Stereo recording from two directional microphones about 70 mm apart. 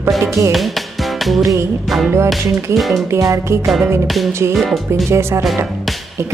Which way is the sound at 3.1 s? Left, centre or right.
Right.